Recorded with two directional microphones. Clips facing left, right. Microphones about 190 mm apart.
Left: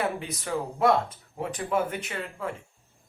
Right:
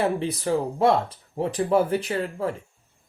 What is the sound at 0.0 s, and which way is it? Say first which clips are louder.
Speech: right 6 dB; 30° right (ahead or behind).